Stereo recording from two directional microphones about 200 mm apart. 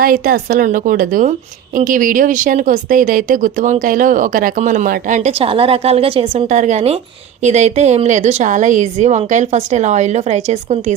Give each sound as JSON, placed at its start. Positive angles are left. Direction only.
{"t": 0.0, "sound": "speech", "side_deg": -45}